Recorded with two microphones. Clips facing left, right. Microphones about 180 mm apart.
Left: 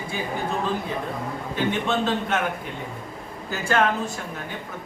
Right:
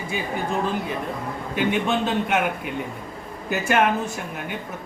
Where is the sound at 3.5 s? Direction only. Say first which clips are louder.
Right 2 dB; 15° right (ahead or behind).